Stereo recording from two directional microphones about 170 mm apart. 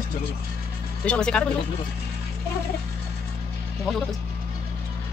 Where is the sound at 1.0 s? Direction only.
5° left (ahead or behind).